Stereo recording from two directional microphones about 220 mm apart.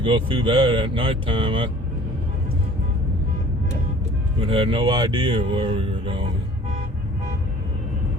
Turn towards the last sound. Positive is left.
turn(degrees=-25)  # may be behind; listen again after turning